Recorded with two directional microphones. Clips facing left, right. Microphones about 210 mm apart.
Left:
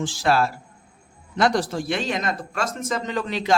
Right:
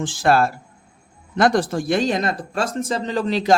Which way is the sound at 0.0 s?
50° right (ahead or behind).